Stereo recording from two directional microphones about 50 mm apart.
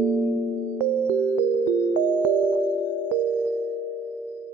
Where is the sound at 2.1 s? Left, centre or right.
Right.